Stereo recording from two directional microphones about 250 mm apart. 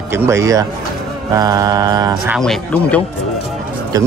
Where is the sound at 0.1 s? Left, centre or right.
Centre.